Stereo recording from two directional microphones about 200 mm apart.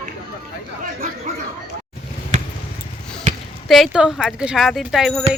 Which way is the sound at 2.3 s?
35° right (ahead or behind).